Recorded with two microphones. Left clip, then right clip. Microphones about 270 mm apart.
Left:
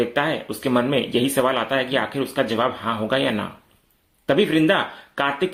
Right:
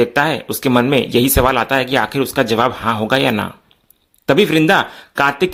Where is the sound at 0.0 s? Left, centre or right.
Right.